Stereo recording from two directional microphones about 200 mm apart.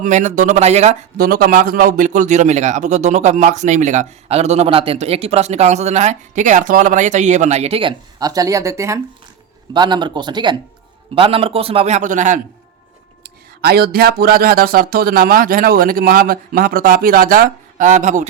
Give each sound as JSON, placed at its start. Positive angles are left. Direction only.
{"t": 0.0, "sound": "a man's voice", "side_deg": -35}
{"t": 13.2, "sound": "speech", "side_deg": -50}